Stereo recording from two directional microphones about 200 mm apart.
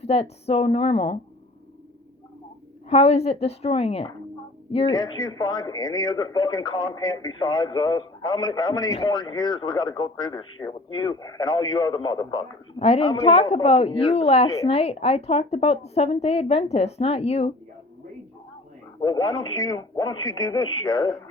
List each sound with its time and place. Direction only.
0.0 s a man's voice: 30° left (ahead or behind)
2.9 s a man's voice: 30° left (ahead or behind)
19.0 s a man's voice: 20° left (ahead or behind)